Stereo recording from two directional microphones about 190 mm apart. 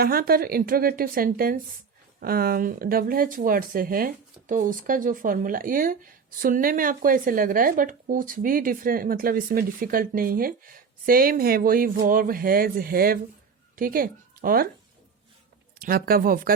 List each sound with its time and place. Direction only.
0.0 s speech: 50° right (ahead or behind)
15.8 s speech: 50° right (ahead or behind)